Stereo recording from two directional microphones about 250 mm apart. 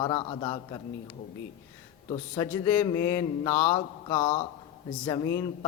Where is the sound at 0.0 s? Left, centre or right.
Centre.